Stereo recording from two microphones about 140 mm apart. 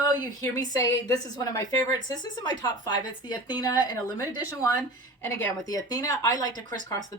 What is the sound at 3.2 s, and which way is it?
Speech, 10° right (ahead or behind).